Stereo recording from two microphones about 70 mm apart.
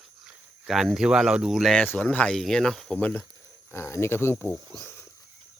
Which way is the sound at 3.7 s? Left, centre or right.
Left.